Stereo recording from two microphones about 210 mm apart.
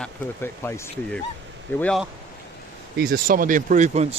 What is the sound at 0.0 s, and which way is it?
Speech, 10° left (ahead or behind).